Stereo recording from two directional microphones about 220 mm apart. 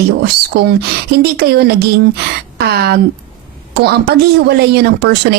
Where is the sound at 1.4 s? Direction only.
45° right (ahead or behind).